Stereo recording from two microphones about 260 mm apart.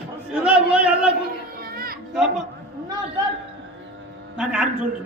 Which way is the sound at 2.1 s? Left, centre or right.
Centre.